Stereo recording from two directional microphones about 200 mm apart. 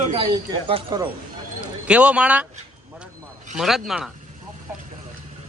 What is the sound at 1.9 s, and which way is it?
Speech, 5° right (ahead or behind).